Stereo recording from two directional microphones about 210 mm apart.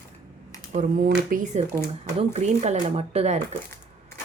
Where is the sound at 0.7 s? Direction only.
40° right (ahead or behind).